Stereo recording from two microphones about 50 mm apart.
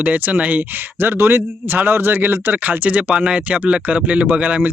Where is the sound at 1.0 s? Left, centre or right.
Right.